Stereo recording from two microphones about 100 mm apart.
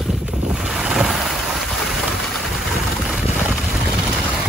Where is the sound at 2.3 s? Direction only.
Centre (ahead or behind).